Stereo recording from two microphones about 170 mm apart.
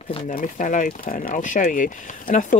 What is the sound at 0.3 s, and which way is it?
Speech, 50° left (ahead or behind).